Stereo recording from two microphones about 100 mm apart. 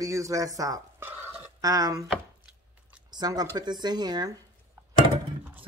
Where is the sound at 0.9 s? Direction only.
20° right (ahead or behind).